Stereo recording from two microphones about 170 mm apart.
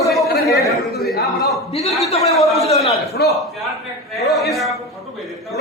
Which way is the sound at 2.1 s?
35° left (ahead or behind).